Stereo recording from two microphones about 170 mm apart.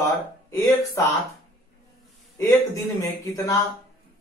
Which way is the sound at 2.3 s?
20° left (ahead or behind).